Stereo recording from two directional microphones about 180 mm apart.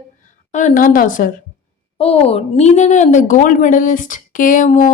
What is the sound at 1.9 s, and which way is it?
Speech, 35° left (ahead or behind).